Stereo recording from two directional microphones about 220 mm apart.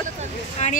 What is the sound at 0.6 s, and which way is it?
Speech, 30° left (ahead or behind).